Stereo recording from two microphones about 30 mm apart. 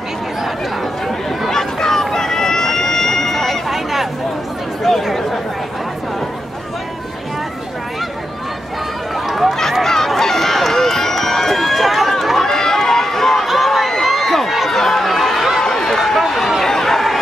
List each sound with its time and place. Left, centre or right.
1.5 s run: centre
3.7 s a sound: centre
4.9 s chatter: centre
9.3 s run: centre
9.8 s run: centre
13.5 s crowd: centre
14.0 s run: centre
15.6 s run: left
16.3 s a sound: centre
16.6 s chatter: centre